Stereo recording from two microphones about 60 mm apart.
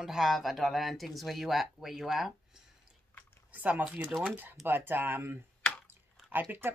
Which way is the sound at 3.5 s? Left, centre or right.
Right.